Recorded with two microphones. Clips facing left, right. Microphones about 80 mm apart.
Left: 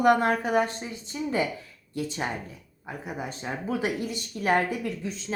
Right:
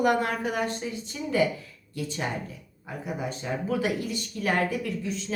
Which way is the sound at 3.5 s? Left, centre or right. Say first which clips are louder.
Right 1 dB; left.